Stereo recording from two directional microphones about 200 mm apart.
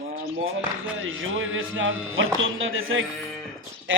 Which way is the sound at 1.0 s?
80° right.